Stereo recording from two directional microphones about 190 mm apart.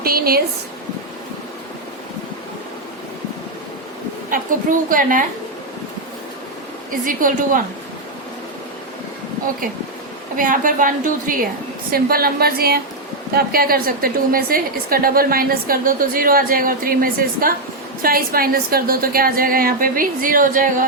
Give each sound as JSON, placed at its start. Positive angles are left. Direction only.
{"t": 0.0, "sound": "a sound", "side_deg": -50}
{"t": 4.9, "sound": "a woman's voice", "side_deg": -45}
{"t": 6.9, "sound": "a woman's voice", "side_deg": -45}
{"t": 10.3, "sound": "a woman's voice", "side_deg": -45}